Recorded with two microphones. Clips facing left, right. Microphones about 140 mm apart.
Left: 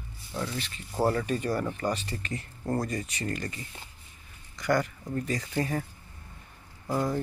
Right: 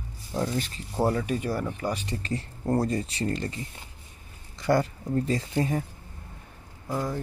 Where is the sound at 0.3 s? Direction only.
40° right (ahead or behind).